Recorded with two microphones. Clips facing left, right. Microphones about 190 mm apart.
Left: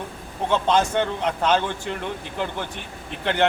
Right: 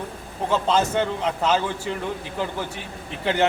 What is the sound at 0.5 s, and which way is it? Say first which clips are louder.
A man's voice: left 1 dB; 5° right (ahead or behind).